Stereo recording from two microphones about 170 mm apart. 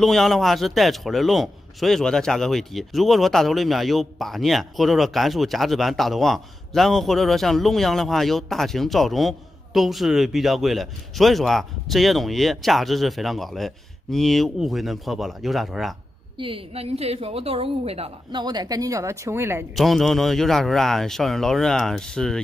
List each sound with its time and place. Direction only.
0.0 s a man's voice: centre (ahead or behind)
16.3 s a woman's voice: 30° right (ahead or behind); by 19.6 s 15° right (ahead or behind)
19.7 s a man's voice: centre (ahead or behind)